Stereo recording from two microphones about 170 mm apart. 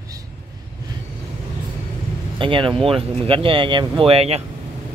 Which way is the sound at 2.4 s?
30° right (ahead or behind).